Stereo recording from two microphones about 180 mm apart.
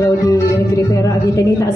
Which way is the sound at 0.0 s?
15° left (ahead or behind).